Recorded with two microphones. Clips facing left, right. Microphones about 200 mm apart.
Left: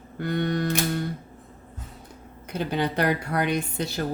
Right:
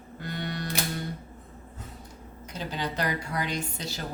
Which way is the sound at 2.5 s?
55° left (ahead or behind).